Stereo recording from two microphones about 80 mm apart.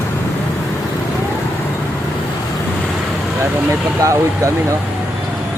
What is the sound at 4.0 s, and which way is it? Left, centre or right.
Speech, right.